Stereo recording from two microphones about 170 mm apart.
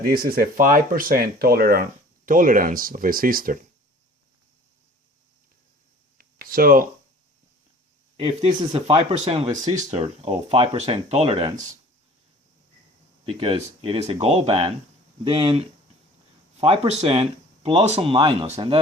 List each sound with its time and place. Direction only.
0.0 s speech: 60° right (ahead or behind)
6.1 s a sound: 60° right (ahead or behind)
8.1 s speech: 40° right (ahead or behind)
13.2 s speech: 30° right (ahead or behind)